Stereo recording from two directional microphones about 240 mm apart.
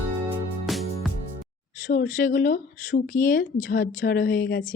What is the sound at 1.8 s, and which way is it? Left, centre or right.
Speech, left.